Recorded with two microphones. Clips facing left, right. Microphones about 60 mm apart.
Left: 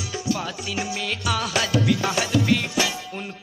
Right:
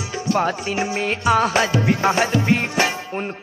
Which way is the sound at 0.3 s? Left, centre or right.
Right.